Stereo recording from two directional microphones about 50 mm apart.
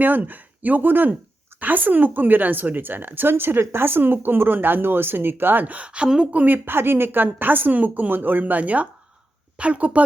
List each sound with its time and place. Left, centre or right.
0.0 s a woman's voice: right
6.3 s a woman's voice: right